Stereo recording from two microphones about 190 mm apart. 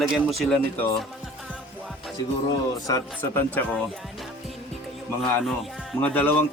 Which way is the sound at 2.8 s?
15° left (ahead or behind).